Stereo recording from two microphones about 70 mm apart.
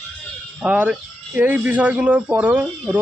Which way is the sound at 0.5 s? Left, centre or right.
Right.